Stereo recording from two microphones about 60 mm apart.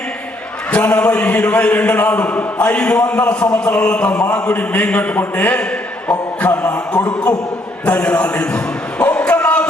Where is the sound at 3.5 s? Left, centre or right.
Centre.